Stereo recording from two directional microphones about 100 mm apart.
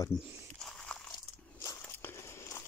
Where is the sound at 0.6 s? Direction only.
5° left (ahead or behind).